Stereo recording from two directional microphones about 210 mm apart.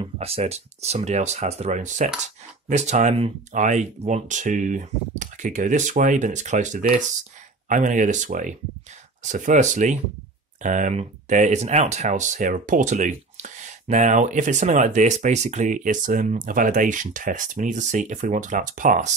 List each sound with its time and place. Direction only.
0.0 s speech: 30° right (ahead or behind)